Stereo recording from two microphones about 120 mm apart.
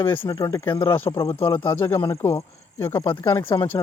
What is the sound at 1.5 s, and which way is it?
Speech, 15° left (ahead or behind).